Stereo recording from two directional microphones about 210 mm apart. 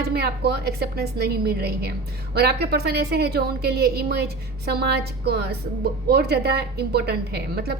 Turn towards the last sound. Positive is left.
turn(degrees=-50)  # may be behind; listen again after turning